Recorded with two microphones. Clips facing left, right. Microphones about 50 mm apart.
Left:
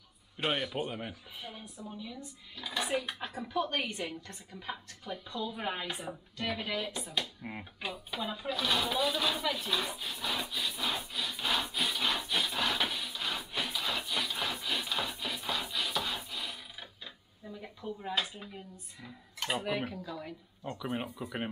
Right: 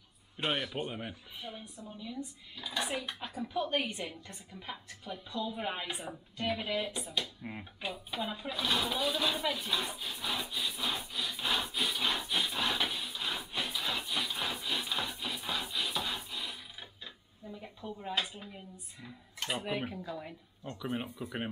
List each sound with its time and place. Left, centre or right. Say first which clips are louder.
0.4 s speech: left 1 dB; centre
3.6 s speech: right 1 dB; centre
7.2 s speech: left 1 dB; centre
7.8 s speech: even; centre
8.2 s speech: left 2 dB; centre
10.5 s wood: left 1 dB; centre
13.0 s a sound: left 1 dB; centre
15.1 s wood: left 1 dB; centre
17.8 s speech: left 1 dB; centre
19.9 s speech: even; centre
20.8 s speech: even; centre